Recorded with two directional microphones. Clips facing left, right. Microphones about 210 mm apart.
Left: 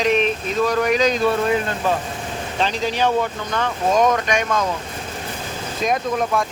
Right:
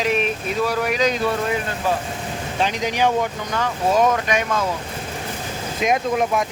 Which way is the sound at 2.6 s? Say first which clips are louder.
Even; 15° right (ahead or behind).